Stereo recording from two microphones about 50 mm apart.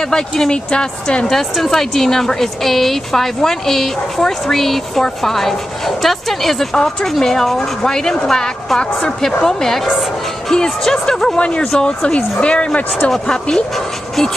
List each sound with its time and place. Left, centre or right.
0.1 s a woman's voice: centre
11.3 s speech: left
11.6 s a woman's voice: centre